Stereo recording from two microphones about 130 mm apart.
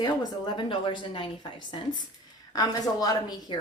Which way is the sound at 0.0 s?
35° left (ahead or behind).